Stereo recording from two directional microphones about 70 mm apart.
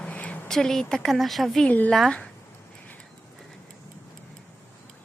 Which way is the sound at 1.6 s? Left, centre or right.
Left.